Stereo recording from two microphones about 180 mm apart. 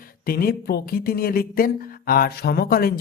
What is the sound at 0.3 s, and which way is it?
Speech, 55° left (ahead or behind).